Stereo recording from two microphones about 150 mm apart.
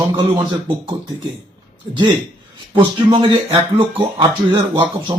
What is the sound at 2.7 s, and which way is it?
Speech, 40° right (ahead or behind).